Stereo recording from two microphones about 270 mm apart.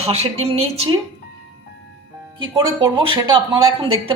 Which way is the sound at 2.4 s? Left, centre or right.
Centre.